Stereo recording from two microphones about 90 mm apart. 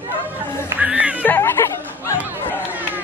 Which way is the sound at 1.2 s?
25° left (ahead or behind).